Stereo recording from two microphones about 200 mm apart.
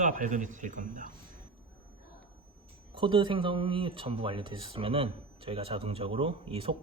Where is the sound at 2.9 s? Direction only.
25° right (ahead or behind).